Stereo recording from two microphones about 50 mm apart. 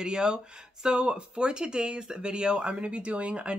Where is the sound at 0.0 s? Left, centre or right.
Centre.